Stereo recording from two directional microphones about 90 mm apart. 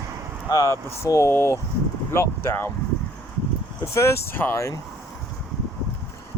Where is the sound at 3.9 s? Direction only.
30° left (ahead or behind).